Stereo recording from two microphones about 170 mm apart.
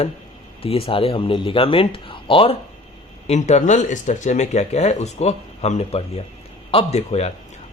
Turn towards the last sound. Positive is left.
turn(degrees=40)  # may be behind; listen again after turning